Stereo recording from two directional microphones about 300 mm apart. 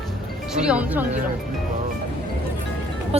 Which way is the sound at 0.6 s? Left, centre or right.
Centre.